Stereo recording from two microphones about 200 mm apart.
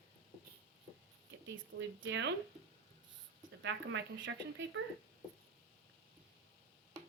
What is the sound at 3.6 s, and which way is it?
Speech, 65° right (ahead or behind).